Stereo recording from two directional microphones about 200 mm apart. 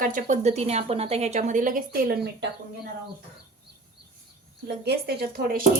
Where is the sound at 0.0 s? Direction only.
40° right (ahead or behind).